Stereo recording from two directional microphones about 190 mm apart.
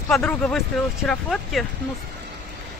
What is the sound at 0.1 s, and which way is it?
Speech, 5° left (ahead or behind).